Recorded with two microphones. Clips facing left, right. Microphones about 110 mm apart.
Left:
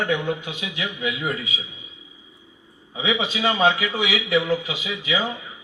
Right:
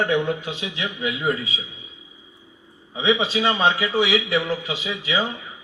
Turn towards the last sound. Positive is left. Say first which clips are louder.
# right 1 dB
turn(degrees=-30)  # may be behind; listen again after turning